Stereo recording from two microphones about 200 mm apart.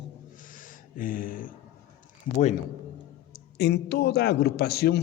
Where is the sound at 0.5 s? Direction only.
45° left (ahead or behind).